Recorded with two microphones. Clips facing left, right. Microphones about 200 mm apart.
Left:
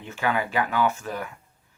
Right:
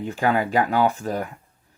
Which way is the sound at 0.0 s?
35° right (ahead or behind).